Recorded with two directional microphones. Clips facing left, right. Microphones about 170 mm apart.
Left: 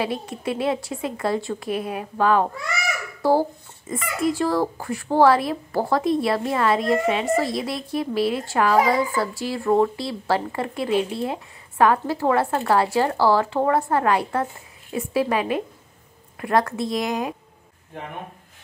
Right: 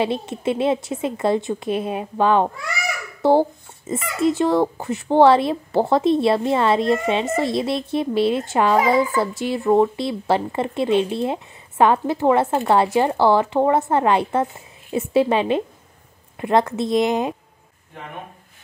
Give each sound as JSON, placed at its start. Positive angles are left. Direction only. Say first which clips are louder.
{"t": 0.0, "sound": "speech", "louder": "right 4 dB", "side_deg": -25}